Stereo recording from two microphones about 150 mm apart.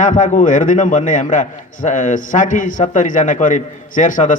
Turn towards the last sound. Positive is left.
turn(degrees=60)  # may be behind; listen again after turning